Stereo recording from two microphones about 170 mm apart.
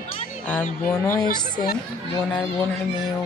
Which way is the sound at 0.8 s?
15° left (ahead or behind).